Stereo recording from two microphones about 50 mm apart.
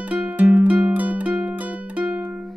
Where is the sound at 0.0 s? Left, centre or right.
Right.